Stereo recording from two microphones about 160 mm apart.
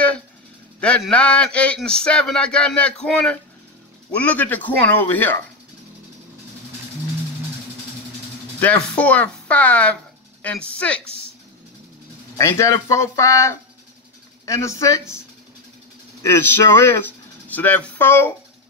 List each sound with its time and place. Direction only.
0.7 s speech: 5° left (ahead or behind)
8.5 s speech: 10° left (ahead or behind)
12.4 s speech: 20° left (ahead or behind)